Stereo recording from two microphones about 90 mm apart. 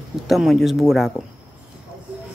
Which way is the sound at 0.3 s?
Centre (ahead or behind).